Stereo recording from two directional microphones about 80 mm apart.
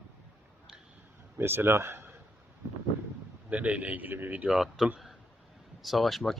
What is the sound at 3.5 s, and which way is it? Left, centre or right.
A man's voice, centre.